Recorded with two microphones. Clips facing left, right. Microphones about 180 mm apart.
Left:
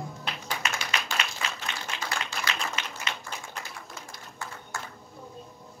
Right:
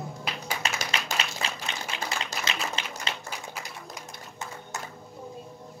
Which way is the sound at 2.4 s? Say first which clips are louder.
Left 1 dB; 5° right (ahead or behind).